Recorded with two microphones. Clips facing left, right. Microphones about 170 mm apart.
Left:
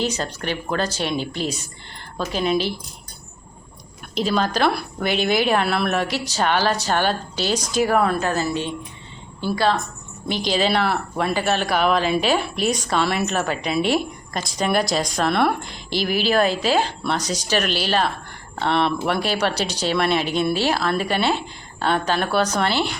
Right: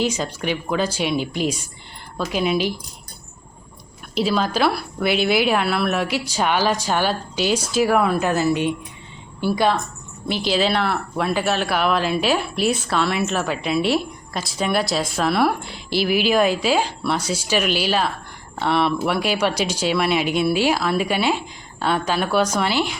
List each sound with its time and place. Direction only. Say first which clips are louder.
0.0 s a woman's voice: right 2 dB; 10° right (ahead or behind)
4.1 s a woman's voice: right 1 dB; 5° right (ahead or behind)